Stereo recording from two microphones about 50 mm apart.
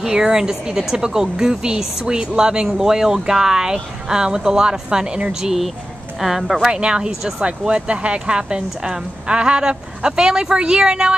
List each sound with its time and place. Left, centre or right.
0.0 s speech: centre